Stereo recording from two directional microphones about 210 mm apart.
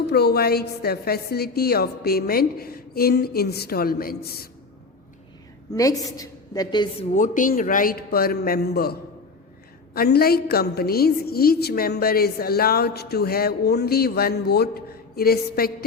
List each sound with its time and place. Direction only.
0.1 s a woman's voice: 50° left (ahead or behind)
5.7 s a woman's voice: 15° left (ahead or behind)
7.2 s a woman's voice: 40° left (ahead or behind)